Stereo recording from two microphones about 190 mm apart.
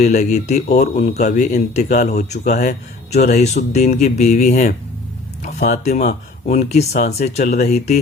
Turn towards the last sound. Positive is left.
turn(degrees=40)  # may be behind; listen again after turning